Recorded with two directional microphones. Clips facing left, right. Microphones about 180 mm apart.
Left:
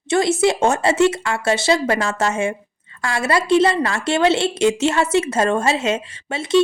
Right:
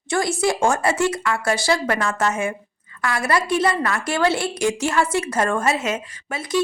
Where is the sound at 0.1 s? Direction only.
25° left (ahead or behind).